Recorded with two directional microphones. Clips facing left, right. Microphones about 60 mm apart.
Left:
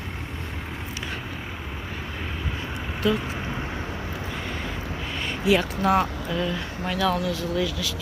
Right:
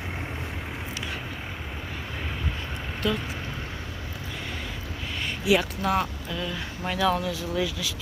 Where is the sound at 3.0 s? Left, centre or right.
Centre.